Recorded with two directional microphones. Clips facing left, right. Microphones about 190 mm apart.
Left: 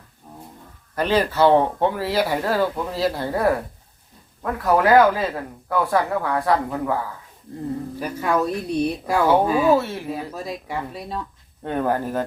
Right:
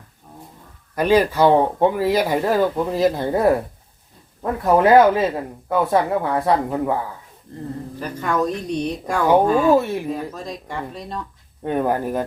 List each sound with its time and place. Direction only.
0.9 s speech: 10° right (ahead or behind)
7.9 s speech: 10° left (ahead or behind)
9.7 s speech: 15° right (ahead or behind)
10.1 s speech: 5° left (ahead or behind)
11.6 s speech: 15° right (ahead or behind)